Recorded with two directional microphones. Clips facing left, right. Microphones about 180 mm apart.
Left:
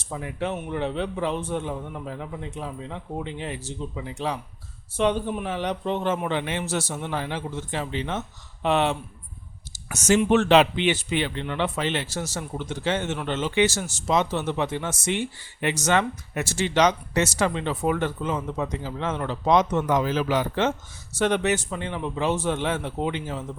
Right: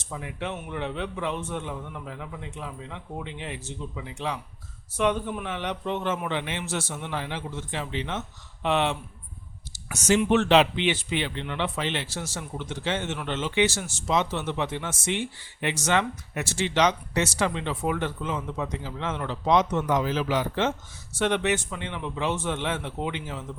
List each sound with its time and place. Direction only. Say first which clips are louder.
0.0 s speech: left 4 dB; 40° left (ahead or behind)